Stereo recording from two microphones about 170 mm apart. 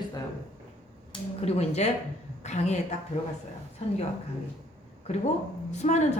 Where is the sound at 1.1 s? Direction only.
40° left (ahead or behind).